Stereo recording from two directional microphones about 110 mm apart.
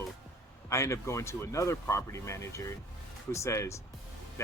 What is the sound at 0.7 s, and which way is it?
Speech, 25° left (ahead or behind).